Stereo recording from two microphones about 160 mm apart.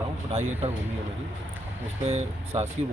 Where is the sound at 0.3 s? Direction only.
40° right (ahead or behind).